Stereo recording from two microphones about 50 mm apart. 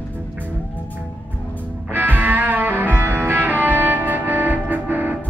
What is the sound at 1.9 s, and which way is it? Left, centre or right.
Music, right.